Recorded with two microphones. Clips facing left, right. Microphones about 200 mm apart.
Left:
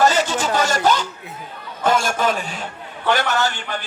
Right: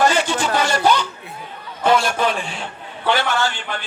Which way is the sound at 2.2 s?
45° left (ahead or behind).